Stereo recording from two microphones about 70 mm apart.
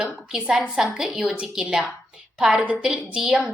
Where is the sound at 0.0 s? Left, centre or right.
Centre.